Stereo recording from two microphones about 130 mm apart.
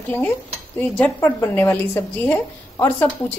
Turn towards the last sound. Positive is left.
turn(degrees=15)  # may be behind; listen again after turning